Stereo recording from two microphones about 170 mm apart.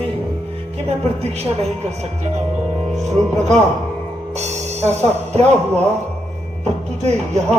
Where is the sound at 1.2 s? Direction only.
40° right (ahead or behind).